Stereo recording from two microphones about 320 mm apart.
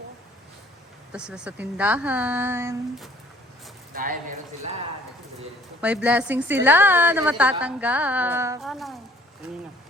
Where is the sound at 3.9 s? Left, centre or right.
Right.